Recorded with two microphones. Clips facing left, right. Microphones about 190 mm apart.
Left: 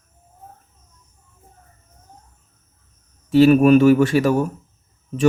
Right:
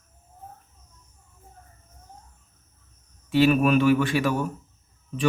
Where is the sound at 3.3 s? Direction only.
40° left (ahead or behind).